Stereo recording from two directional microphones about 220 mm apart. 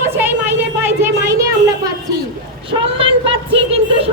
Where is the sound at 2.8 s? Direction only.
25° right (ahead or behind).